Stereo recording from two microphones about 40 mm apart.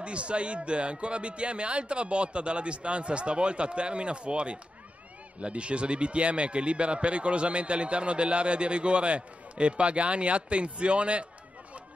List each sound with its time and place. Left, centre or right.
0.0 s speech: right